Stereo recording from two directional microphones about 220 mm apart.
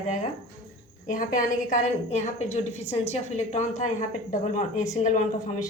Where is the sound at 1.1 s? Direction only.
35° left (ahead or behind).